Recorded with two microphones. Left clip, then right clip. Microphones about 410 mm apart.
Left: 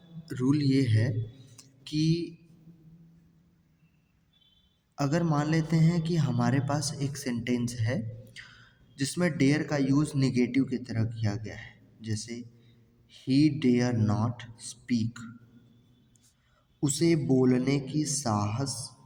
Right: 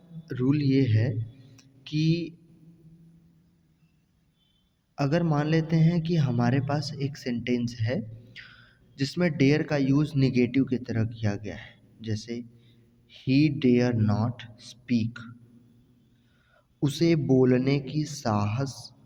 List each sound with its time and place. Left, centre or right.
0.3 s a man's voice: right
1.5 s a sound: right
4.9 s a man's voice: right
16.8 s a man's voice: right